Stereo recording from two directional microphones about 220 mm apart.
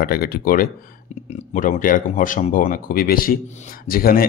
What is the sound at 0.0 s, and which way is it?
Speech, 45° left (ahead or behind).